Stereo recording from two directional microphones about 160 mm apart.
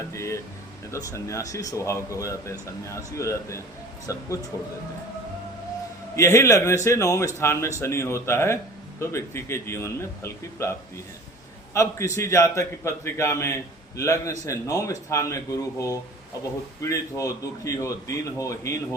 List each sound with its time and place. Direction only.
0.1 s a man's voice: 20° left (ahead or behind)
6.1 s a man's voice: 20° left (ahead or behind)